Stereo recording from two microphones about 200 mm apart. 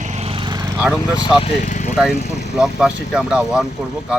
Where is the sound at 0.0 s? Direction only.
35° right (ahead or behind).